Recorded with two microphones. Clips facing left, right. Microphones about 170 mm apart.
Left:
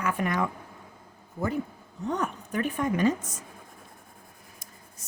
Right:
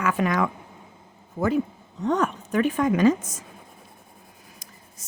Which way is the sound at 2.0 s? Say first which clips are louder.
Right 6 dB; 90° right.